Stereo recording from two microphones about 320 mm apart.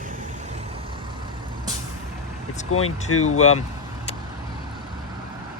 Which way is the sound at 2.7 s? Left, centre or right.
Left.